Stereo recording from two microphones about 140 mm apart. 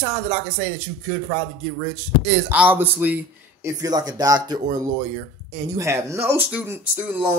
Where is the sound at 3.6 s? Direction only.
25° right (ahead or behind).